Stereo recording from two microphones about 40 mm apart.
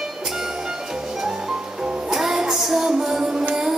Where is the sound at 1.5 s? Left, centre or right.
Right.